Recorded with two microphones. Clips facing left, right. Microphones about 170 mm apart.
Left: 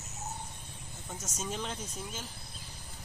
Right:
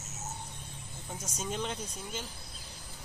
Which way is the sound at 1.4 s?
Centre (ahead or behind).